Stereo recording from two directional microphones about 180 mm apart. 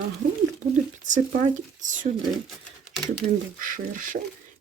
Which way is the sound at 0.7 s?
45° right (ahead or behind).